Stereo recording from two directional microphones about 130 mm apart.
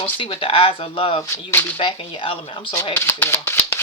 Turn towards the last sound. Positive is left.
turn(degrees=15)  # may be behind; listen again after turning